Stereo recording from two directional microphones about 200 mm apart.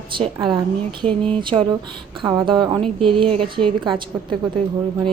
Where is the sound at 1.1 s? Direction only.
5° left (ahead or behind).